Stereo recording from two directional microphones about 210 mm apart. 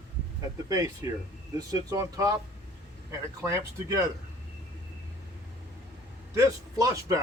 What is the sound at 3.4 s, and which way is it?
Speech, 15° right (ahead or behind).